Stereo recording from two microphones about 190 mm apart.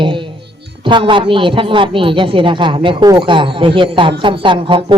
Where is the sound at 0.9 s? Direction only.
25° right (ahead or behind).